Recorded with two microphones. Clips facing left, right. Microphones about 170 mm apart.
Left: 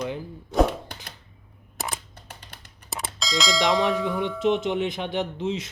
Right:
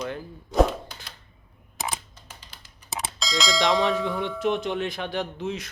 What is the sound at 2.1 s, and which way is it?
Tick, 60° left (ahead or behind).